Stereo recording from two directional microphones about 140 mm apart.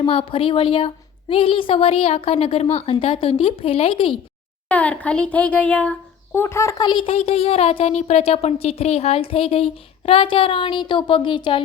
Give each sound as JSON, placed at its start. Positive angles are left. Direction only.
{"t": 0.0, "sound": "a child's voice", "side_deg": 40}
{"t": 4.7, "sound": "a child's voice", "side_deg": 10}